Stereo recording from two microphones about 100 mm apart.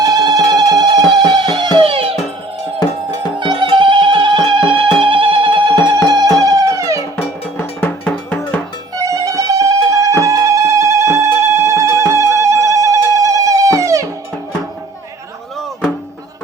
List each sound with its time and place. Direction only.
0.0 s music: 40° right (ahead or behind)
1.8 s music: 70° right (ahead or behind)
3.4 s music: 55° right (ahead or behind)
6.4 s music: 35° right (ahead or behind)
7.2 s cowbell: 20° left (ahead or behind)
9.0 s music: 35° right (ahead or behind)